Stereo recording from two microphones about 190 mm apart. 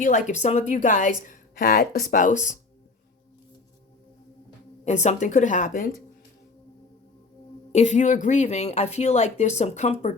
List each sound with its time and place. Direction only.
0.0 s speech: 40° left (ahead or behind)
4.9 s speech: 35° left (ahead or behind)
7.7 s speech: 35° left (ahead or behind)